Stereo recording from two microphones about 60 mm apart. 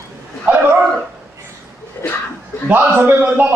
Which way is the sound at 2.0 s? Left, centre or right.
Left.